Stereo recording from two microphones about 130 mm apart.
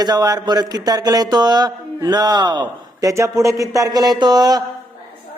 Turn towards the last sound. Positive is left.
turn(degrees=-30)  # may be behind; listen again after turning